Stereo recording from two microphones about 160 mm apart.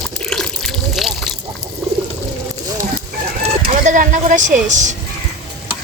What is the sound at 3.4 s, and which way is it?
Music, 50° right (ahead or behind).